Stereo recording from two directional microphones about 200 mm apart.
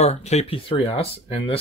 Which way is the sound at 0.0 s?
35° left (ahead or behind).